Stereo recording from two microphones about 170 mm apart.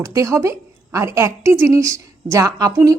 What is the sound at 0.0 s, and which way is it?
A woman's voice, 20° right (ahead or behind).